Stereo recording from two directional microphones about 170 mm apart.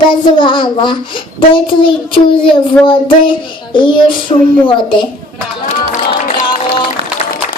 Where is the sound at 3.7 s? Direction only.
30° left (ahead or behind).